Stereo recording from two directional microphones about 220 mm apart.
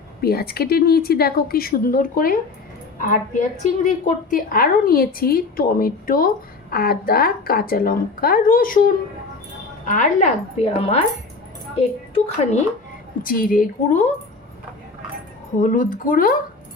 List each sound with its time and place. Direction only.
0.2 s a woman's voice: 45° left (ahead or behind)
11.8 s a woman's voice: 30° left (ahead or behind)
13.2 s a woman's voice: 40° left (ahead or behind)
15.6 s a woman's voice: 35° left (ahead or behind)